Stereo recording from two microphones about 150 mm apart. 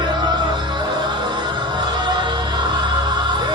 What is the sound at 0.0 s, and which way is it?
Music, 30° right (ahead or behind).